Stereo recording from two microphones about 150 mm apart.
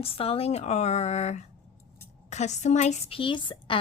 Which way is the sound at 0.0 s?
40° left (ahead or behind).